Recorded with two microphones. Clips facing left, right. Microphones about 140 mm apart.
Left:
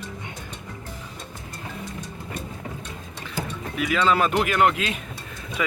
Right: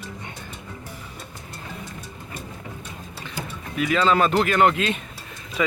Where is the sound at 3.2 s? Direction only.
Centre (ahead or behind).